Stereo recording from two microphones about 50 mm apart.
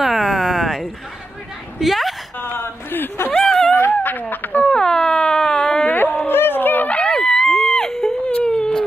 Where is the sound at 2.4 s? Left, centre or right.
Left.